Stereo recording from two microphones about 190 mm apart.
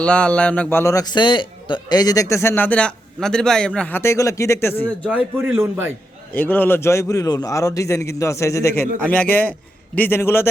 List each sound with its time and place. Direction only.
0.0 s a man's voice: 5° left (ahead or behind)
5.0 s a man's voice: 5° right (ahead or behind)
6.3 s a man's voice: 10° left (ahead or behind)